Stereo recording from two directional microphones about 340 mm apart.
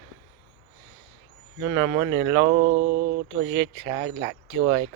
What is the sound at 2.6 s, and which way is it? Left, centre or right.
Mantra, centre.